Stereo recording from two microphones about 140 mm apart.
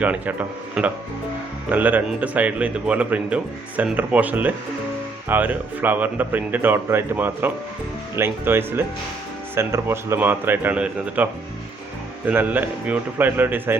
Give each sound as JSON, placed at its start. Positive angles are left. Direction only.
{"t": 0.0, "sound": "speech", "side_deg": -10}